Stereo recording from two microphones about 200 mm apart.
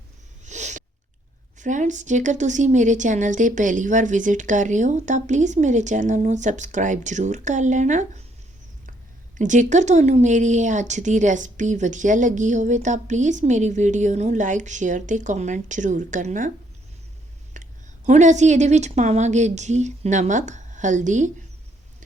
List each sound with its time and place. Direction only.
0.4 s a sound: 35° right (ahead or behind)
1.5 s a woman's voice: 40° right (ahead or behind)
9.4 s a woman's voice: 40° right (ahead or behind)
17.5 s a woman's voice: 40° right (ahead or behind)